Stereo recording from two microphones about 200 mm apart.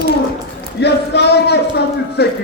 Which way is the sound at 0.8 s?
55° left (ahead or behind).